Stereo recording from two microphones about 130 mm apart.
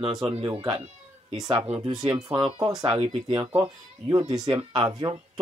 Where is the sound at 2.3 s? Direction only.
45° right (ahead or behind).